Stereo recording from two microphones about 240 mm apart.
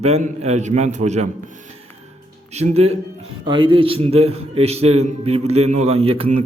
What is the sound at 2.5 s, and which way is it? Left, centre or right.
A man's voice, right.